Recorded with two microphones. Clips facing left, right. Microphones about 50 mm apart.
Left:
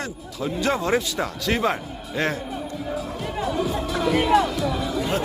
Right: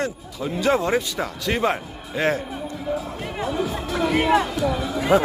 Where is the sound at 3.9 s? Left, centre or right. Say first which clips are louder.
Right 1 dB; right.